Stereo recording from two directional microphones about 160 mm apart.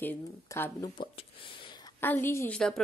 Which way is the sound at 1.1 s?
30° left (ahead or behind).